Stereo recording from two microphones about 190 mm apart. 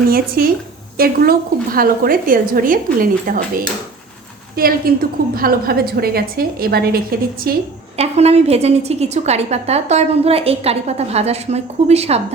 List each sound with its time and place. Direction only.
0.1 s a woman's voice: 50° right (ahead or behind)
7.9 s a woman's voice: 35° right (ahead or behind)